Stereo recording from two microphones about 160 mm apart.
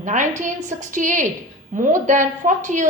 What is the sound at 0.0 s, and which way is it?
A woman's voice, 50° right (ahead or behind).